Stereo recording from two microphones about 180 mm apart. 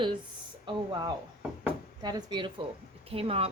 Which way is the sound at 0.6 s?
25° right (ahead or behind).